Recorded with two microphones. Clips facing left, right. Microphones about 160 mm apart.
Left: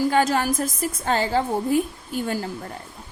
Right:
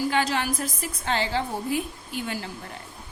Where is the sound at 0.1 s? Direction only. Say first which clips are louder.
Left 5 dB; 45° left (ahead or behind).